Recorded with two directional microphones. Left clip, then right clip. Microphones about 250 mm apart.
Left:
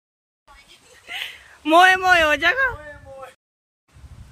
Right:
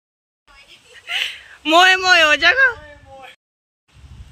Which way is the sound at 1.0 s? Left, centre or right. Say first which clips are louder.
Right 8 dB; centre.